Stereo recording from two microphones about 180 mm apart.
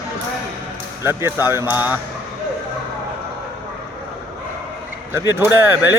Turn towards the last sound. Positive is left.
turn(degrees=-15)  # may be behind; listen again after turning